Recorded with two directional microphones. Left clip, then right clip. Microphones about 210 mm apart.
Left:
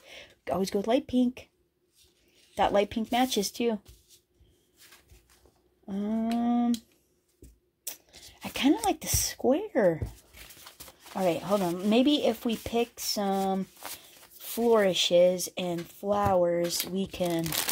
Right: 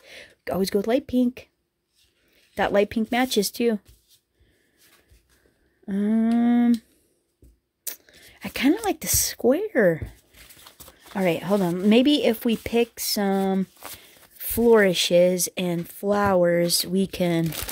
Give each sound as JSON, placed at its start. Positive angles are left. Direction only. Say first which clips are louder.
{"t": 0.0, "sound": "speech", "louder": "right 5 dB", "side_deg": -25}
{"t": 2.5, "sound": "speech", "louder": "right 4 dB", "side_deg": -25}
{"t": 5.9, "sound": "speech", "louder": "right 7 dB", "side_deg": -35}
{"t": 7.8, "sound": "a sound", "louder": "right 4 dB", "side_deg": -25}
{"t": 10.9, "sound": "speech", "louder": "right 4 dB", "side_deg": -20}
{"t": 13.7, "sound": "a sound", "louder": "right 2 dB", "side_deg": -20}
{"t": 14.4, "sound": "speech", "louder": "right 6 dB", "side_deg": -30}